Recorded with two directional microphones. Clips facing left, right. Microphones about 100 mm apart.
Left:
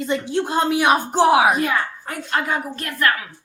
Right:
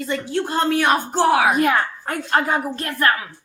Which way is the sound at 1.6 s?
55° right (ahead or behind).